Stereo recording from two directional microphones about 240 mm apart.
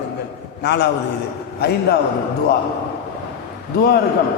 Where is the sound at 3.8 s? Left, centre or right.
Left.